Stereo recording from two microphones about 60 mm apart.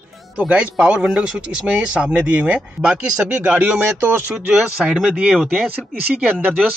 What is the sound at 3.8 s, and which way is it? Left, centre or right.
Speech, right.